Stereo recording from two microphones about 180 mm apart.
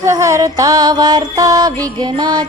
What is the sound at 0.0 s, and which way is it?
Mantra, 15° right (ahead or behind).